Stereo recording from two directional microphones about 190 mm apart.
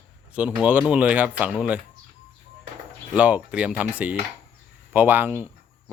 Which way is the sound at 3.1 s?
5° right (ahead or behind).